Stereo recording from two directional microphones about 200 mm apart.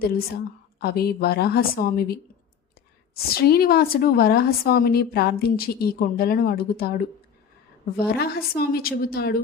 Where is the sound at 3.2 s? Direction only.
50° left (ahead or behind).